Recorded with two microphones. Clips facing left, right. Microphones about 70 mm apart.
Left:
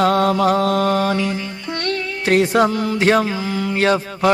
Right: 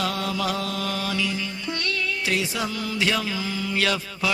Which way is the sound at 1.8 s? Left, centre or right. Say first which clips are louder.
Left 8 dB; left.